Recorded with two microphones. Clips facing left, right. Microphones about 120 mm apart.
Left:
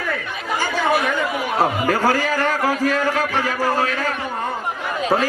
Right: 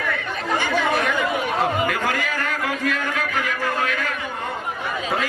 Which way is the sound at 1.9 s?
35° left (ahead or behind).